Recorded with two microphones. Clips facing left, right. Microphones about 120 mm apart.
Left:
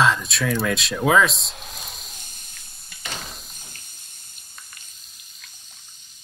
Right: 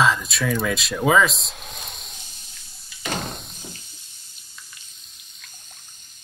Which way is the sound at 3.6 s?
50° left (ahead or behind).